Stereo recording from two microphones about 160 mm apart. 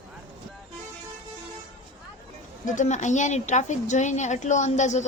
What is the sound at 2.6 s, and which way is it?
Speech, 50° left (ahead or behind).